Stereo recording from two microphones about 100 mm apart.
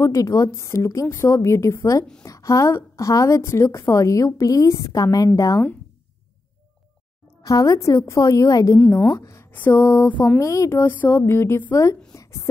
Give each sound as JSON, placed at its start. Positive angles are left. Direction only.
{"t": 0.0, "sound": "a woman's voice", "side_deg": 30}
{"t": 7.4, "sound": "a woman's voice", "side_deg": 35}
{"t": 8.7, "sound": "a woman's voice", "side_deg": 25}
{"t": 10.4, "sound": "a woman's voice", "side_deg": 30}
{"t": 12.1, "sound": "a sound", "side_deg": 30}